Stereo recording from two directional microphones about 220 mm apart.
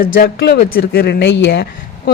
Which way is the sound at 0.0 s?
45° left (ahead or behind).